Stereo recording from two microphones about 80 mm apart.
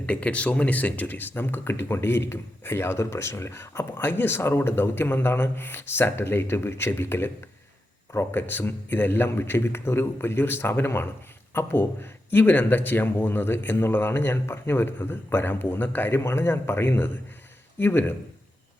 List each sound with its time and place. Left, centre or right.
0.0 s speech: centre